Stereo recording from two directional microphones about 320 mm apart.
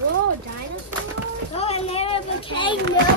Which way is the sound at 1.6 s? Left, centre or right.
Centre.